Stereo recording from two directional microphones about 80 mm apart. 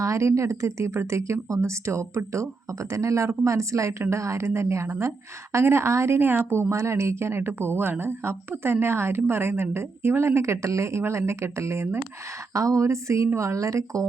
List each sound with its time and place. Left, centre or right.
0.0 s a woman's voice: right